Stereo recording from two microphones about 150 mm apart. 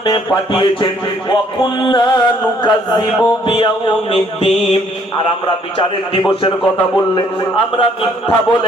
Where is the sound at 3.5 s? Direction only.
35° left (ahead or behind).